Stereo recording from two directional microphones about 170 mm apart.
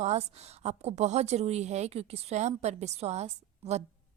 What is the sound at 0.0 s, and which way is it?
A woman's voice, 40° right (ahead or behind).